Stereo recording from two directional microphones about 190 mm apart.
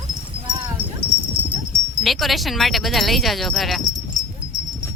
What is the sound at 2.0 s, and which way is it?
Speech, centre (ahead or behind).